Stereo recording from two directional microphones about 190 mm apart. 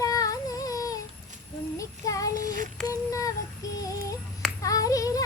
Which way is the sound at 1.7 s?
15° left (ahead or behind).